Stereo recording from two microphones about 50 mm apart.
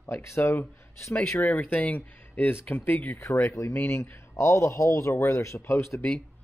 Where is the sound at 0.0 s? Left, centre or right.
Left.